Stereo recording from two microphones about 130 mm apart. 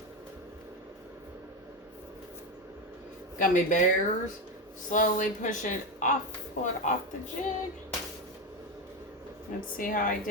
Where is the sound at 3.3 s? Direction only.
80° left.